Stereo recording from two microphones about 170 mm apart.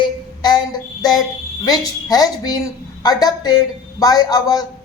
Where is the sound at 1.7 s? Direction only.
20° left (ahead or behind).